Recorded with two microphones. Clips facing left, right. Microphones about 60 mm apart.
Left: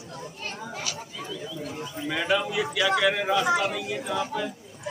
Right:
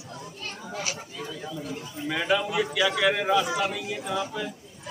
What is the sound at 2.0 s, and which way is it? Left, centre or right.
A man's voice, centre.